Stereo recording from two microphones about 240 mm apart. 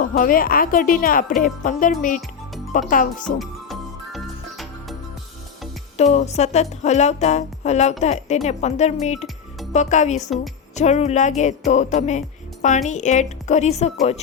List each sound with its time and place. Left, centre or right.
0.0 s speech: left
3.3 s music: centre
6.0 s speech: left
10.2 s a woman's voice: centre
10.8 s speech: left